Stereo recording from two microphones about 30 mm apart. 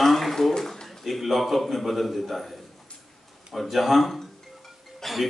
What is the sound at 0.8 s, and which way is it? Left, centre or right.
A man's voice, centre.